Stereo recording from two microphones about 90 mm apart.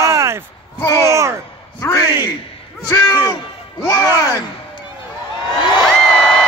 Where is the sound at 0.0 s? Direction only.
30° right (ahead or behind).